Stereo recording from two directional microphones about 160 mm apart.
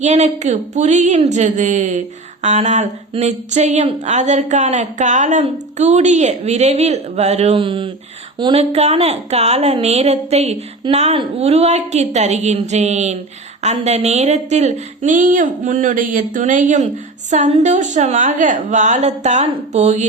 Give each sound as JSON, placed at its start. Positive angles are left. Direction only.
{"t": 0.0, "sound": "a woman's voice", "side_deg": -45}
{"t": 8.7, "sound": "a woman's voice", "side_deg": -40}